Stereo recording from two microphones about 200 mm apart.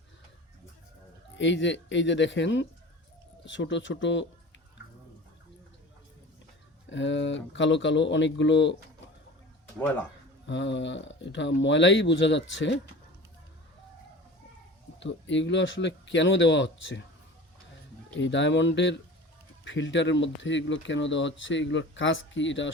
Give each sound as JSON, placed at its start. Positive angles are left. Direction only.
{"t": 1.4, "sound": "speech", "side_deg": 65}
{"t": 6.9, "sound": "speech", "side_deg": 65}
{"t": 10.4, "sound": "speech", "side_deg": 65}
{"t": 14.9, "sound": "speech", "side_deg": 65}
{"t": 18.2, "sound": "speech", "side_deg": 65}